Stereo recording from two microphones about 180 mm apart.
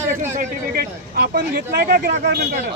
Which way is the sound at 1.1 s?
60° right (ahead or behind).